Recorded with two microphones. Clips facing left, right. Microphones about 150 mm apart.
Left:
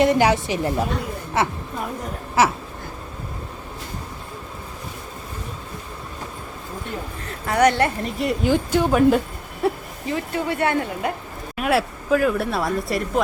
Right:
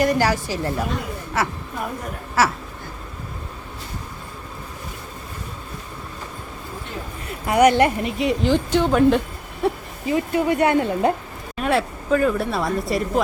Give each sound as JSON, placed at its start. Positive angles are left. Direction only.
{"t": 0.0, "sound": "a woman's voice", "side_deg": 20}
{"t": 7.4, "sound": "speech", "side_deg": -15}
{"t": 8.2, "sound": "speech", "side_deg": 5}
{"t": 10.1, "sound": "speech", "side_deg": -20}
{"t": 11.5, "sound": "speech", "side_deg": 5}